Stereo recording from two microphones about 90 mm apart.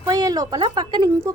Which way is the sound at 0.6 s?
55° right (ahead or behind).